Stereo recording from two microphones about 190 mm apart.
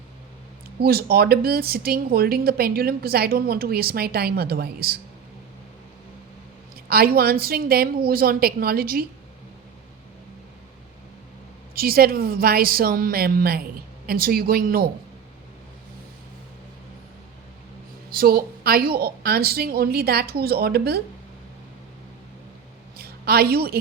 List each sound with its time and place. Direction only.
0.8 s a woman's voice: 55° right (ahead or behind)
6.8 s a woman's voice: 55° right (ahead or behind)
11.7 s a woman's voice: 50° right (ahead or behind)
18.1 s a woman's voice: 50° right (ahead or behind)
23.0 s a sound: 55° right (ahead or behind)